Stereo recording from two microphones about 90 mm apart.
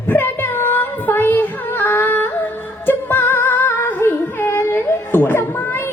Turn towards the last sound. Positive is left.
turn(degrees=25)  # may be behind; listen again after turning